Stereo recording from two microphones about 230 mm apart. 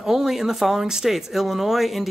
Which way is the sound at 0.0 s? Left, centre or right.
Centre.